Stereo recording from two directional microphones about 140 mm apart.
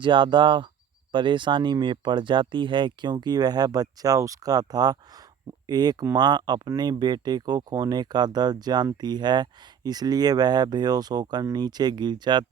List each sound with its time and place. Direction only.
0.0 s speech: 35° right (ahead or behind)